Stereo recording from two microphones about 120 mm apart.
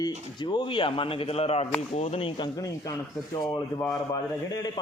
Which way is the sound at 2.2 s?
45° left (ahead or behind).